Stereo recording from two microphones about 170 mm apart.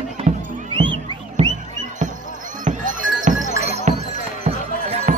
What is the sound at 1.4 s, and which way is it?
Music, 40° right (ahead or behind).